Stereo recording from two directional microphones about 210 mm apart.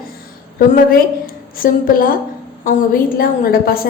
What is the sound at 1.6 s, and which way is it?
A woman's voice, 45° left (ahead or behind).